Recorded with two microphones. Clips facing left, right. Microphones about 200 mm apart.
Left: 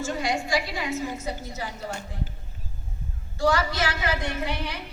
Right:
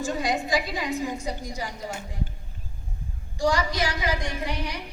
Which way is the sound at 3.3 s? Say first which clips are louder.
Left 1 dB; 15° right (ahead or behind).